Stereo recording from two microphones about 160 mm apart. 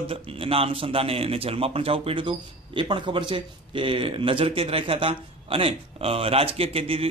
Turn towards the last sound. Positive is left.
turn(degrees=-35)  # may be behind; listen again after turning